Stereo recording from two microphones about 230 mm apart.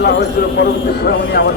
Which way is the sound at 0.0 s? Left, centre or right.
Left.